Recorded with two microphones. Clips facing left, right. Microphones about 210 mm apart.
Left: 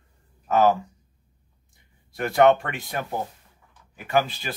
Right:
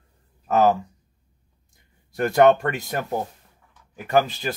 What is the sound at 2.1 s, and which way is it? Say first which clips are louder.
Speech: right 2 dB; 40° right (ahead or behind).